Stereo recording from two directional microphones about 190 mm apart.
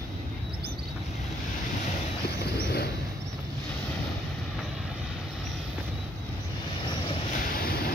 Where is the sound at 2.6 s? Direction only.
55° left (ahead or behind).